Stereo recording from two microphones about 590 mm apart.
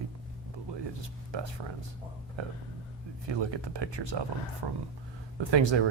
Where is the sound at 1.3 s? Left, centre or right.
Right.